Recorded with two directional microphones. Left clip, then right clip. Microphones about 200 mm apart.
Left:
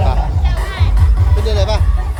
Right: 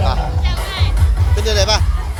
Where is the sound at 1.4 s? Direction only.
5° right (ahead or behind).